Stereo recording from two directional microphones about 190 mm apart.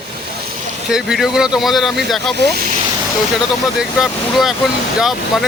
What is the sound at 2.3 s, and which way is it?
Speech, 60° right (ahead or behind).